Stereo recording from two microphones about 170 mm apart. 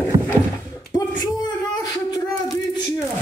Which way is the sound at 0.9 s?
25° left (ahead or behind).